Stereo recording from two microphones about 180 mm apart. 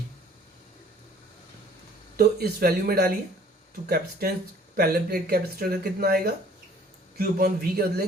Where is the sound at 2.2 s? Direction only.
55° right (ahead or behind).